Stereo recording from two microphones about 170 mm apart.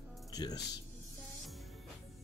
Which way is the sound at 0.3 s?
20° left (ahead or behind).